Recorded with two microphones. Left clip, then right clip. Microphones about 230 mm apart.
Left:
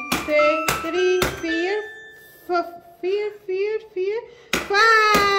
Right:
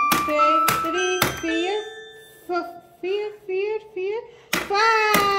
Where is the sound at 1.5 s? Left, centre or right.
Left.